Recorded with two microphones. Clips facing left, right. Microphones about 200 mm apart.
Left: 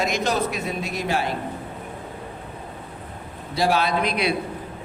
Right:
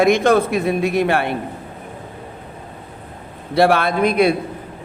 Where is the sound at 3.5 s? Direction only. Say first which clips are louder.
Right 6 dB; 60° right (ahead or behind).